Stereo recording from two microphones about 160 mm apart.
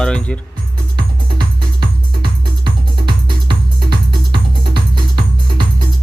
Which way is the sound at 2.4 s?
30° right (ahead or behind).